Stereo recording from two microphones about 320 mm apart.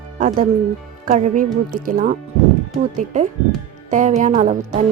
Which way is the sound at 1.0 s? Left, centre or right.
Right.